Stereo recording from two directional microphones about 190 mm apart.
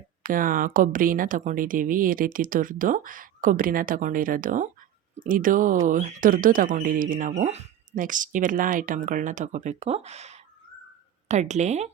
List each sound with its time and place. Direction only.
0.2 s speech: 45° right (ahead or behind)